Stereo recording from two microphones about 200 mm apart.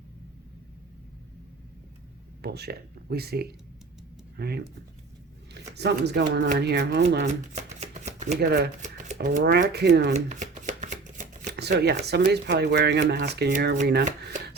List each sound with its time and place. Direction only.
2.4 s speech: 55° right (ahead or behind)
7.3 s chopping: 35° right (ahead or behind)
8.4 s speech: 55° right (ahead or behind)
10.2 s shuffling cards: 35° right (ahead or behind)
11.5 s speech: 55° right (ahead or behind)